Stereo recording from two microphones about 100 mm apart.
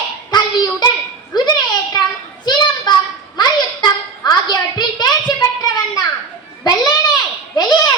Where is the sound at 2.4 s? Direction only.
45° left (ahead or behind).